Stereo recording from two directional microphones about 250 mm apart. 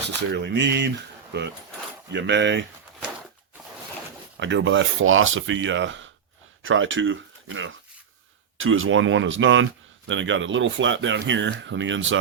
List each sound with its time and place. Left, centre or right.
0.2 s speech: right
4.4 s speech: right